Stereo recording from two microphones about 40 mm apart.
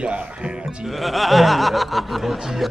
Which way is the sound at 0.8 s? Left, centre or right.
Centre.